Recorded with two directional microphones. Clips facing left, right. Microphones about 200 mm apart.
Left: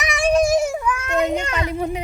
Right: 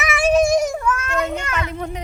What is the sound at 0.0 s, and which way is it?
Children playing, 5° right (ahead or behind).